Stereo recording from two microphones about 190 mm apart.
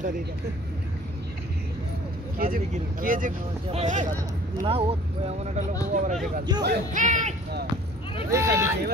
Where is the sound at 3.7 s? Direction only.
35° right (ahead or behind).